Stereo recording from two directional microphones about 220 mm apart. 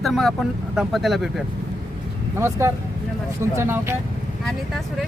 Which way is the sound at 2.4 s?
10° right (ahead or behind).